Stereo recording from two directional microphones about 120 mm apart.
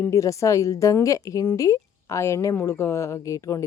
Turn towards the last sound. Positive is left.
turn(degrees=25)  # may be behind; listen again after turning